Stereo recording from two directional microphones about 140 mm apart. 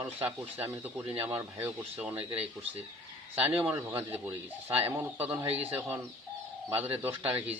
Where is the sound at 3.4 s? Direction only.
10° right (ahead or behind).